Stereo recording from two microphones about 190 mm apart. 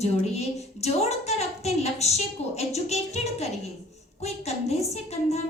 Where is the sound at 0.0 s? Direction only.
35° left (ahead or behind).